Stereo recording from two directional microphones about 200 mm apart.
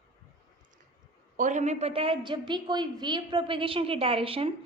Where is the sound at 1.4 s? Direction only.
40° right (ahead or behind).